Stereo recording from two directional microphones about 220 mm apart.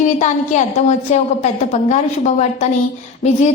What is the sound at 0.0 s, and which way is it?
A woman's voice, 35° left (ahead or behind).